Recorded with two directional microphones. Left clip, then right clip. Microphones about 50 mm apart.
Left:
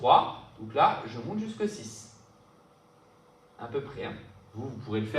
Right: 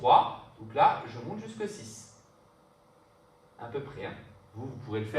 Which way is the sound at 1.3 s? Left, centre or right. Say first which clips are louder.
Left 6 dB; centre.